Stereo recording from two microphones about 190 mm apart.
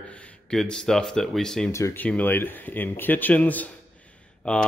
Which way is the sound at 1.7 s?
15° left (ahead or behind).